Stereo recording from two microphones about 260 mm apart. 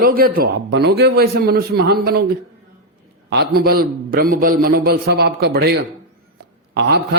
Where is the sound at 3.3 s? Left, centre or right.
Right.